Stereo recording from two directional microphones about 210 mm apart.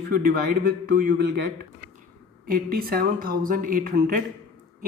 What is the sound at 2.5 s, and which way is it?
A man's voice, 45° right (ahead or behind).